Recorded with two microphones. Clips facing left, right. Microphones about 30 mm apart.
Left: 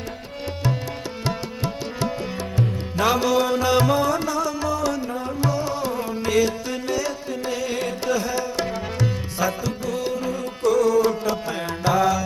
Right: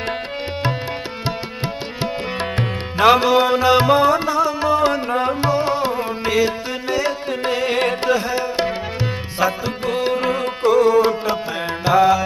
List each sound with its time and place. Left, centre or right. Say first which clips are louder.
1.6 s music: right 1 dB; right
5.4 s music: right 6 dB; right
5.9 s music: right 2 dB; right
7.3 s carnatic music: right 6 dB; right
8.0 s music: right 4 dB; right
9.8 s music: right 7 dB; right
10.6 s music: right 4 dB; right